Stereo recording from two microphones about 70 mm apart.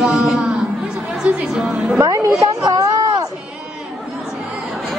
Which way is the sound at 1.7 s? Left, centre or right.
Right.